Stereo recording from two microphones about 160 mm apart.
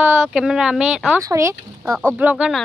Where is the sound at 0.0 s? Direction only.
5° right (ahead or behind).